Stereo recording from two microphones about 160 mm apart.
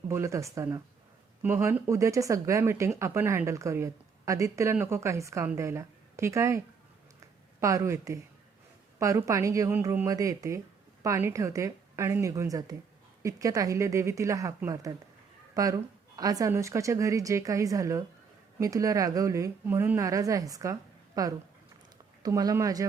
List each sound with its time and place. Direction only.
0.1 s speech: 20° right (ahead or behind)
7.6 s a woman's voice: 20° right (ahead or behind)